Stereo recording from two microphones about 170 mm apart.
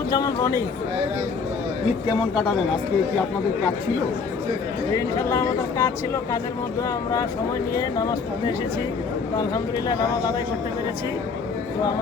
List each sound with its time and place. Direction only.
0.1 s speech: 20° left (ahead or behind)
4.9 s speech: 15° left (ahead or behind)
7.8 s speech: 20° left (ahead or behind)